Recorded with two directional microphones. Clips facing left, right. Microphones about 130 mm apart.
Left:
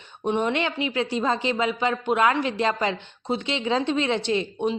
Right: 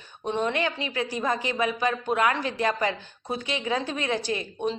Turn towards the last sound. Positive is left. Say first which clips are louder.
# left 4 dB
turn(degrees=20)  # may be behind; listen again after turning